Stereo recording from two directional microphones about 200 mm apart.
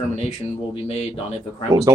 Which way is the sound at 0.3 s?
30° left (ahead or behind).